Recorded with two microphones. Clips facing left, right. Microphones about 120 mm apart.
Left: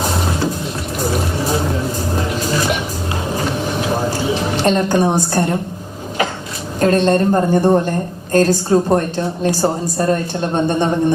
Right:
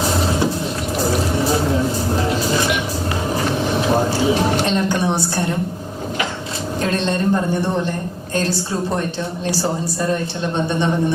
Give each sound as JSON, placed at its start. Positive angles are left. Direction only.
{"t": 4.6, "sound": "a woman's voice", "side_deg": 45}
{"t": 6.8, "sound": "a woman's voice", "side_deg": 45}